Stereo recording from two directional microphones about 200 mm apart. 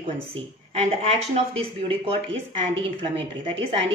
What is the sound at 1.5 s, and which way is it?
Speech, 30° right (ahead or behind).